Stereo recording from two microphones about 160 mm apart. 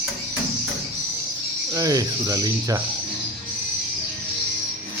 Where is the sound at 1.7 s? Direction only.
20° right (ahead or behind).